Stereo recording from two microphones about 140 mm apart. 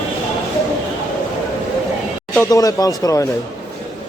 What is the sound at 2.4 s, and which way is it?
Speech, 25° left (ahead or behind).